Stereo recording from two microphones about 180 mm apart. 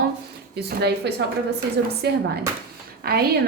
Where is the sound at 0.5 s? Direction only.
65° right (ahead or behind).